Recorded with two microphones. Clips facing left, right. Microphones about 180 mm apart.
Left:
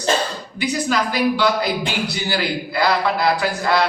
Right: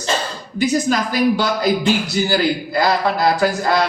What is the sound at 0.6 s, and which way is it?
A man's voice, 45° right (ahead or behind).